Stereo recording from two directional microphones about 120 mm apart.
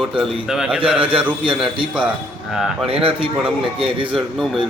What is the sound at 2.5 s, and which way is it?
Speech, centre (ahead or behind).